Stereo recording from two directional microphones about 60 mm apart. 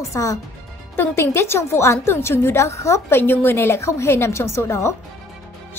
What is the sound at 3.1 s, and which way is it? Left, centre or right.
A woman's voice, left.